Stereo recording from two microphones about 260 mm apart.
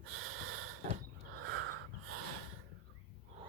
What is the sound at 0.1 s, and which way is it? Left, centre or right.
Wheeze, right.